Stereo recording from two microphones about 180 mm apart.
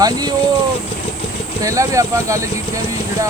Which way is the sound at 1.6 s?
15° right (ahead or behind).